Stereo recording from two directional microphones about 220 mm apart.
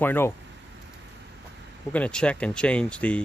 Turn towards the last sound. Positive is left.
turn(degrees=5)  # may be behind; listen again after turning